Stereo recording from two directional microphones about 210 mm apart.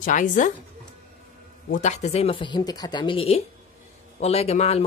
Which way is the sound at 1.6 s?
35° left (ahead or behind).